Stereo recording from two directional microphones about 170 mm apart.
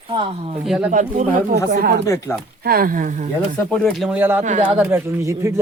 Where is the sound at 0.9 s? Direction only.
50° right (ahead or behind).